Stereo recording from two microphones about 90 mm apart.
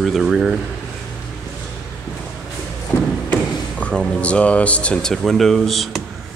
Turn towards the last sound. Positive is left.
turn(degrees=0)  # may be behind; listen again after turning